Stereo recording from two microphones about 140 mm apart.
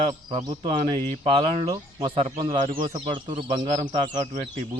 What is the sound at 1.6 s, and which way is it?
Speech, 30° right (ahead or behind).